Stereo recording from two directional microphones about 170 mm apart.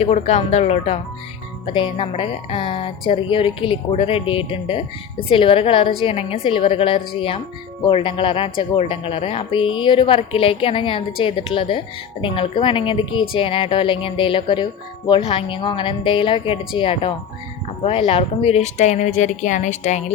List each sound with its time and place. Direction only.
0.0 s speech: 40° left (ahead or behind)
1.6 s speech: 30° left (ahead or behind)